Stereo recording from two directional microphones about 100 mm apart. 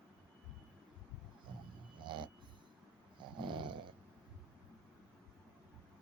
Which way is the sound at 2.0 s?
55° right (ahead or behind).